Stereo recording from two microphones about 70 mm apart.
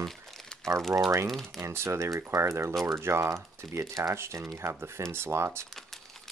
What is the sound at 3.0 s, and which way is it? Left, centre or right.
Speech, right.